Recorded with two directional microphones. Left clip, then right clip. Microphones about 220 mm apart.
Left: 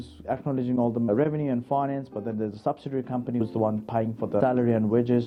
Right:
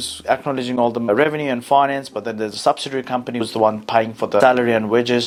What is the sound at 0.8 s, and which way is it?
Speech, 30° right (ahead or behind).